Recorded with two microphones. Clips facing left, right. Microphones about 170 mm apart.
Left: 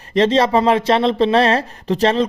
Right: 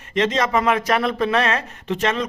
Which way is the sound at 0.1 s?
30° left (ahead or behind).